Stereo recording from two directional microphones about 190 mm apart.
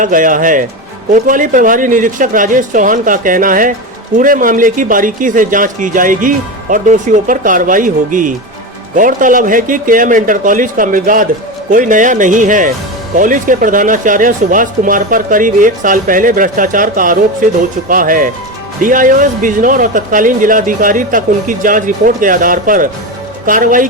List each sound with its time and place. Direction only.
0.0 s speech: 45° right (ahead or behind)